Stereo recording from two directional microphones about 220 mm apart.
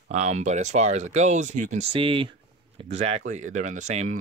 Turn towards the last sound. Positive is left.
turn(degrees=-30)  # may be behind; listen again after turning